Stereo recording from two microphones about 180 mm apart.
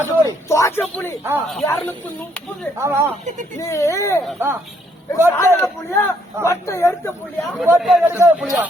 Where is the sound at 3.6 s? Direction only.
15° left (ahead or behind).